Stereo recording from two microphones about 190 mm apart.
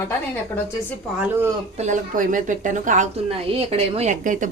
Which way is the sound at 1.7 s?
40° right (ahead or behind).